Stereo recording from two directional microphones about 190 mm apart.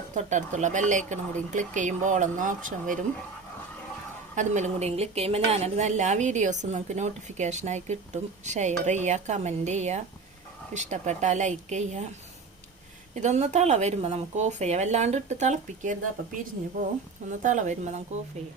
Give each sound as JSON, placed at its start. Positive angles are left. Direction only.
{"t": 0.1, "sound": "a woman's voice", "side_deg": -40}
{"t": 4.4, "sound": "a woman's voice", "side_deg": -40}
{"t": 13.1, "sound": "a woman's voice", "side_deg": -40}
{"t": 17.4, "sound": "a woman's voice", "side_deg": -40}